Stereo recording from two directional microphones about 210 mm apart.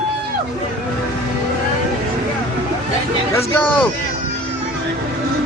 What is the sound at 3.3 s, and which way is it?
Speech, 10° left (ahead or behind).